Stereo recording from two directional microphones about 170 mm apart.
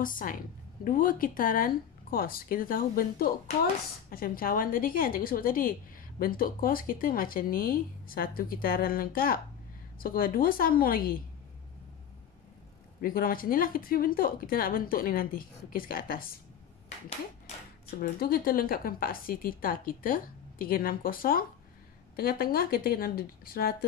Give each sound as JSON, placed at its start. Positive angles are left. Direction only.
{"t": 0.0, "sound": "a woman's voice", "side_deg": 55}
{"t": 13.0, "sound": "a woman's voice", "side_deg": 55}
{"t": 18.0, "sound": "a woman's voice", "side_deg": 60}